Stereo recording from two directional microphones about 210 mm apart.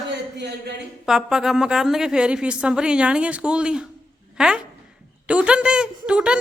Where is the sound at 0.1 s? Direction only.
55° right (ahead or behind).